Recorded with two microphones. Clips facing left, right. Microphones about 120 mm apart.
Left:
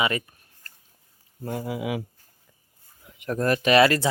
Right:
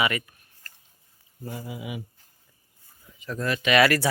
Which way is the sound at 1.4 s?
60° left (ahead or behind).